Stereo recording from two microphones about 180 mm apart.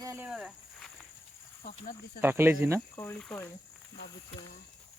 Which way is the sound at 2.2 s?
10° right (ahead or behind).